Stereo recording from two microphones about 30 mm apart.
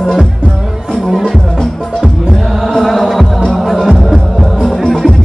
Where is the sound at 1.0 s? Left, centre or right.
Centre.